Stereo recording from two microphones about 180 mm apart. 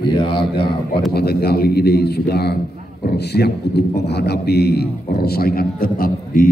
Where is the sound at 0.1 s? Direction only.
25° left (ahead or behind).